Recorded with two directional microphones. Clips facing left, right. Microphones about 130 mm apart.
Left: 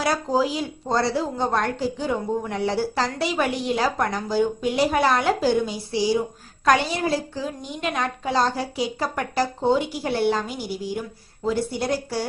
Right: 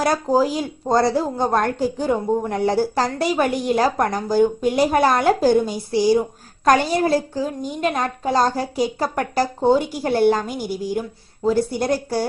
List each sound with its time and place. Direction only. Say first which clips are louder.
0.0 s a woman's voice: right 4 dB; 45° right (ahead or behind)